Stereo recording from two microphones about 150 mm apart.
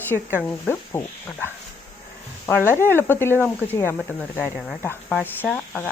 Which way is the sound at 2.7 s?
15° left (ahead or behind).